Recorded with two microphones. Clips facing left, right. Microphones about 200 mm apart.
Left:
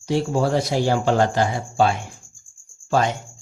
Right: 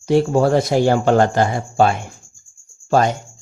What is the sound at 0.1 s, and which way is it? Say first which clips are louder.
Speech: right 6 dB; 55° right (ahead or behind).